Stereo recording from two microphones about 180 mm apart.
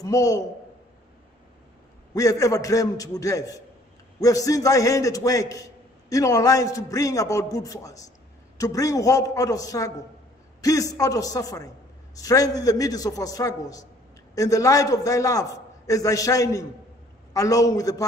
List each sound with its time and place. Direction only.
0.0 s a man's voice: 20° left (ahead or behind)
2.1 s a man's voice: 20° left (ahead or behind)